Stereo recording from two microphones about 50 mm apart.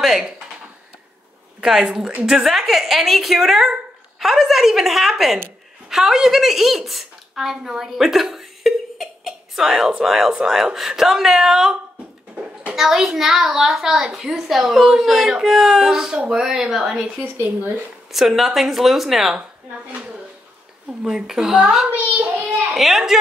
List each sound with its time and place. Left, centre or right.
0.0 s a sound: centre
1.6 s a child's voice: centre
12.7 s a child's voice: centre
21.0 s a child's voice: centre
21.9 s child singing: right
22.8 s a woman's voice: centre